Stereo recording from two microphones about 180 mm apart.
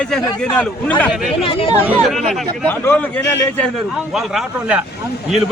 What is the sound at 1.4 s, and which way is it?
Speech, 30° left (ahead or behind).